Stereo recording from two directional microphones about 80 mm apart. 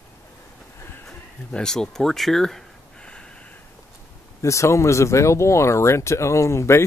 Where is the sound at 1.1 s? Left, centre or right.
Centre.